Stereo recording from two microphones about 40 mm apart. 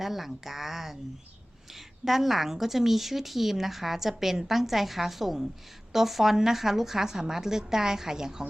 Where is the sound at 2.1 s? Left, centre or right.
Centre.